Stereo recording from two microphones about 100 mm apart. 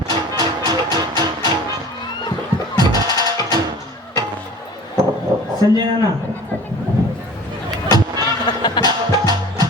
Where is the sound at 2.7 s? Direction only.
40° right (ahead or behind).